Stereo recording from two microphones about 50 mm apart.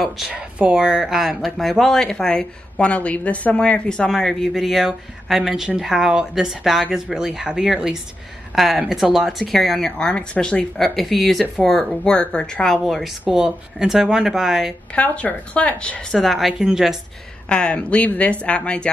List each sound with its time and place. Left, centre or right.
0.3 s speech: right; by 1.5 s centre
1.6 s speech: centre
2.9 s speech: left
4.1 s speech: centre
9.5 s speech: centre; by 10.6 s left
10.8 s speech: centre
12.0 s speech: centre
12.8 s speech: centre
15.0 s speech: left
16.2 s speech: centre
16.5 s speech: centre
17.5 s speech: left